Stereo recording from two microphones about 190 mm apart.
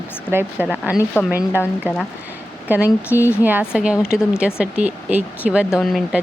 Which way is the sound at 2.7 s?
10° right (ahead or behind).